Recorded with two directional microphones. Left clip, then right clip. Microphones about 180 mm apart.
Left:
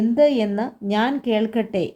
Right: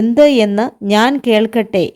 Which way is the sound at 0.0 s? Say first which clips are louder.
Right 8 dB; 40° right (ahead or behind).